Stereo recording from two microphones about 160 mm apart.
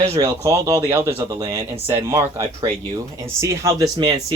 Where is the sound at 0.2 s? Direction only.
20° right (ahead or behind).